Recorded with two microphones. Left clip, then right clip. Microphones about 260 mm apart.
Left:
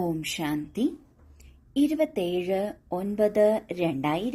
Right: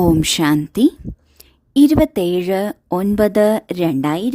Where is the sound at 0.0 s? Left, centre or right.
Right.